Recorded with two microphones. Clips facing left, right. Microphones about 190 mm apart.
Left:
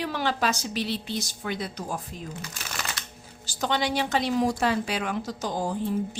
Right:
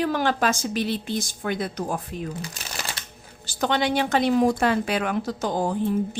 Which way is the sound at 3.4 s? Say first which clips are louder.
Right 4 dB; 60° right (ahead or behind).